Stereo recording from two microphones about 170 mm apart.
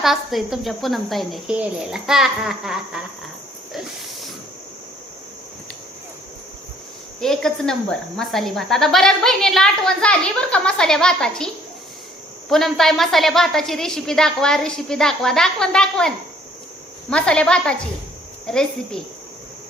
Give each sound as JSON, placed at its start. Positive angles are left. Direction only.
{"t": 0.0, "sound": "speech", "side_deg": 0}
{"t": 3.7, "sound": "a sound", "side_deg": 0}
{"t": 7.2, "sound": "speech", "side_deg": 0}